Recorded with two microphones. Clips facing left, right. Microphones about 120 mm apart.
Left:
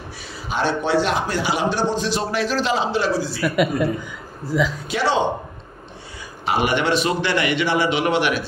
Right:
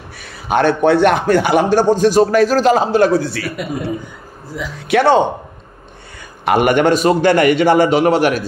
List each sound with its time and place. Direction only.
0.2 s a man's voice: 55° right (ahead or behind)
4.5 s speech: 90° left
4.8 s speech: 60° right (ahead or behind)
6.4 s a man's voice: 55° right (ahead or behind)